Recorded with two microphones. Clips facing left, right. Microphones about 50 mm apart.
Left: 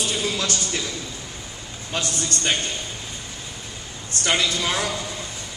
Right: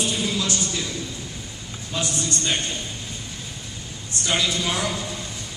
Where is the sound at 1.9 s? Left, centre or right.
Left.